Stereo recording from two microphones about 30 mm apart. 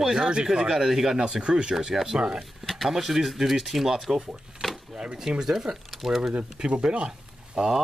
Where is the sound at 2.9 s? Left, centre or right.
Centre.